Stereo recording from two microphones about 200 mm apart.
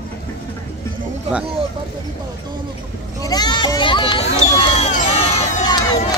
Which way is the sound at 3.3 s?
20° left (ahead or behind).